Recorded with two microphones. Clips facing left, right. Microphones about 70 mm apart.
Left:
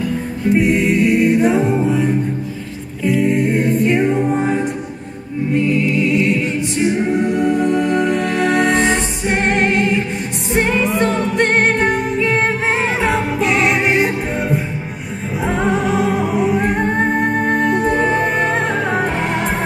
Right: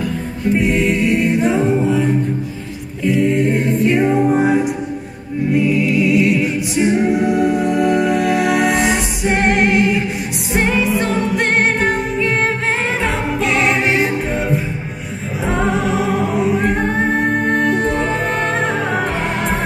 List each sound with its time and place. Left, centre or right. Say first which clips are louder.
0.5 s a capella: left 1 dB; centre
10.5 s music: even; centre